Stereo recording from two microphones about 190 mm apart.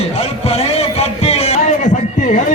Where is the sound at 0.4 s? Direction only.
35° left (ahead or behind).